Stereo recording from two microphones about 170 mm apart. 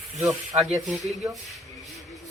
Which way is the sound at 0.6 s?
5° right (ahead or behind).